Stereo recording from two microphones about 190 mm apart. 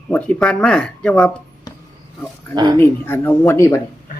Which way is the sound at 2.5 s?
20° right (ahead or behind).